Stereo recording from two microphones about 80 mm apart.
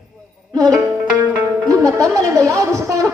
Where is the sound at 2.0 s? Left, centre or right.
Right.